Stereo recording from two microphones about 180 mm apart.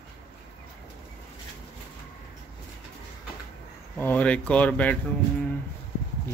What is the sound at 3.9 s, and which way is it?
Speech, 10° left (ahead or behind).